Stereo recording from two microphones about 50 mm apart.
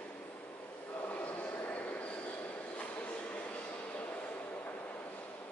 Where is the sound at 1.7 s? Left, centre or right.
Left.